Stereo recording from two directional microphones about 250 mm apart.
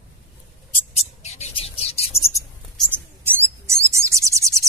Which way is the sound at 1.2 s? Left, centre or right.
Left.